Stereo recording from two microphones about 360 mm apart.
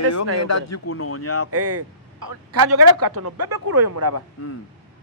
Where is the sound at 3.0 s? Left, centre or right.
Right.